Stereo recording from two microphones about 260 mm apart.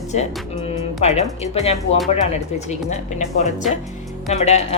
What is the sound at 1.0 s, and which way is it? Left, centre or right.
A woman's voice, left.